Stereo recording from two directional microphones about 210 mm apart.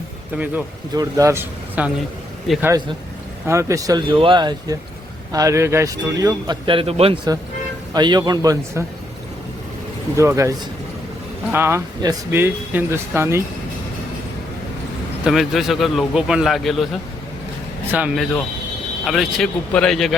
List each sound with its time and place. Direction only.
0.3 s a man's voice: 10° right (ahead or behind)
10.2 s speech: 15° right (ahead or behind)
11.5 s speech: 10° right (ahead or behind)
15.2 s a man's voice: centre (ahead or behind)